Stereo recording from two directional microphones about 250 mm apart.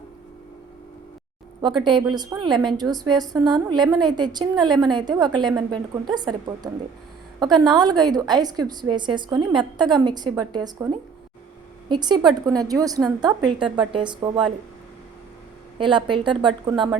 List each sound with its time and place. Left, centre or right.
1.6 s a woman's voice: centre
11.9 s a woman's voice: centre
15.8 s a woman's voice: centre